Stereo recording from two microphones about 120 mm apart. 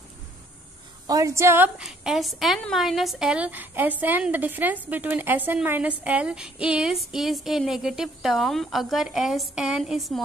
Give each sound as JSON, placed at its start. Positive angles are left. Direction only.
{"t": 1.0, "sound": "a woman's voice", "side_deg": -30}
{"t": 1.8, "sound": "a woman's voice", "side_deg": -5}